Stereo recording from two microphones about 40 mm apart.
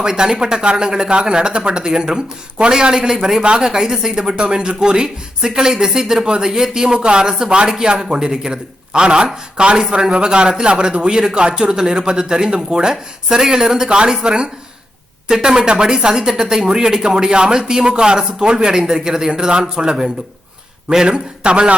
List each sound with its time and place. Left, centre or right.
0.0 s speech: centre
7.3 s speech: centre